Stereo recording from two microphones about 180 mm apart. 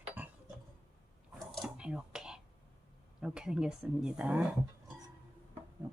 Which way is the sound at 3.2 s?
5° right (ahead or behind).